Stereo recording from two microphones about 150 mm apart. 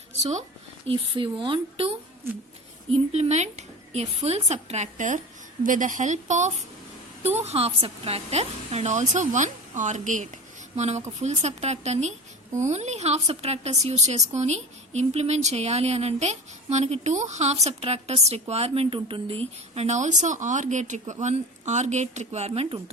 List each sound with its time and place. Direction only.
0.2 s a woman's voice: 50° right (ahead or behind)
0.9 s speech: 35° right (ahead or behind)
2.9 s a woman's voice: 45° right (ahead or behind)